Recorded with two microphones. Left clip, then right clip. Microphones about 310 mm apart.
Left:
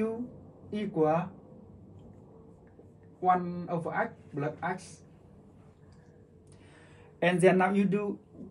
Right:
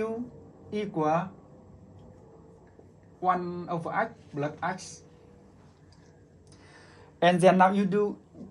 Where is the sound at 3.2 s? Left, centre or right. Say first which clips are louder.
Even; centre.